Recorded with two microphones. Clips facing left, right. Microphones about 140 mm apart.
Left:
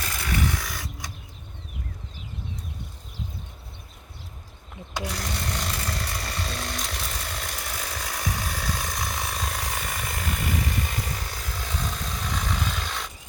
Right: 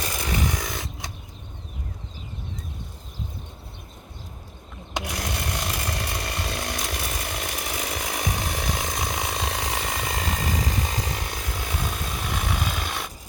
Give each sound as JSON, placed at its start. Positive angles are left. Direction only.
{"t": 0.0, "sound": "a sound", "side_deg": -20}
{"t": 4.9, "sound": "chainsaw", "side_deg": -15}
{"t": 10.3, "sound": "vehicle", "side_deg": -90}
{"t": 11.2, "sound": "vehicle", "side_deg": -15}
{"t": 12.2, "sound": "filing", "side_deg": -10}